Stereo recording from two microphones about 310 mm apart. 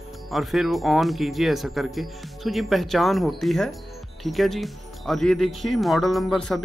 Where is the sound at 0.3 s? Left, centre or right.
Centre.